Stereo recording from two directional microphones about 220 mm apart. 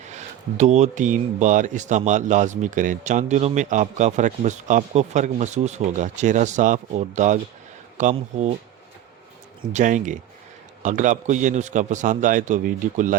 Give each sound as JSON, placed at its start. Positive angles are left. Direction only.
{"t": 0.1, "sound": "speech", "side_deg": -30}
{"t": 9.7, "sound": "speech", "side_deg": -35}